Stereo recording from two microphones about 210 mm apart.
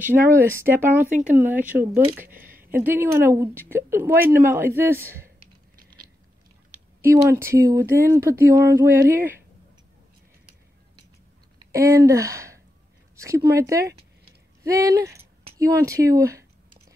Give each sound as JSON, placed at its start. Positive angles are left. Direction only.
{"t": 0.0, "sound": "speech", "side_deg": -10}
{"t": 7.0, "sound": "speech", "side_deg": -10}
{"t": 11.7, "sound": "speech", "side_deg": -15}
{"t": 13.1, "sound": "a sound", "side_deg": -15}
{"t": 13.6, "sound": "speech", "side_deg": -15}